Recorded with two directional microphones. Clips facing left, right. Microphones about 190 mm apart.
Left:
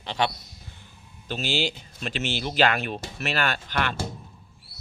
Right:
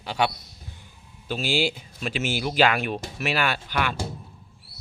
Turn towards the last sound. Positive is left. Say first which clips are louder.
# right 1 dB
turn(degrees=-10)  # may be behind; listen again after turning